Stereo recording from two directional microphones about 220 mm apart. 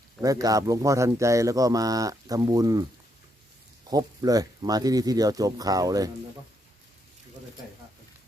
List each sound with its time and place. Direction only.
0.2 s speech: 15° right (ahead or behind)
3.8 s speech: 15° right (ahead or behind)